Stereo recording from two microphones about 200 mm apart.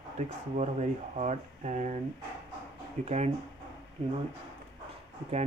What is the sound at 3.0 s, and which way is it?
Speech, 35° right (ahead or behind).